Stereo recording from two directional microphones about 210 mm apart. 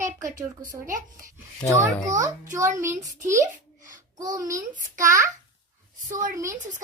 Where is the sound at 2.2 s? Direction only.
15° right (ahead or behind).